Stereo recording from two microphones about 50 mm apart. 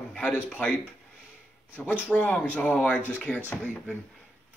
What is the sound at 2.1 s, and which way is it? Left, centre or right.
A man's voice, left.